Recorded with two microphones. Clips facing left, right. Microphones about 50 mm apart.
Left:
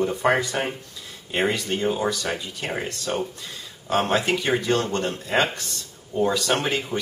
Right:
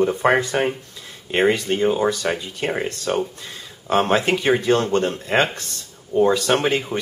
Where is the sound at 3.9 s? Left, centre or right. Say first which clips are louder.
Right 4 dB; right.